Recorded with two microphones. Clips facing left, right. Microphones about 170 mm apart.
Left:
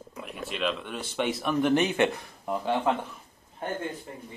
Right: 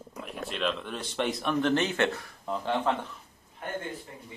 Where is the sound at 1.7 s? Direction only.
15° left (ahead or behind).